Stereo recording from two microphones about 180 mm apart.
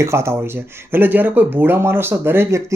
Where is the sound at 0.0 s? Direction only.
15° right (ahead or behind).